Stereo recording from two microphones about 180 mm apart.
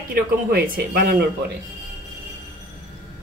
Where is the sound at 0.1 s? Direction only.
60° right (ahead or behind).